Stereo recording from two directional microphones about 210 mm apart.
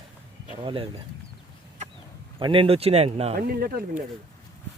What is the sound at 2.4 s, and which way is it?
Speech, 25° right (ahead or behind).